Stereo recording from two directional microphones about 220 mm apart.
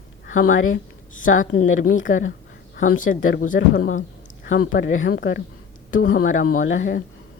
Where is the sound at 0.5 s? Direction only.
65° left (ahead or behind).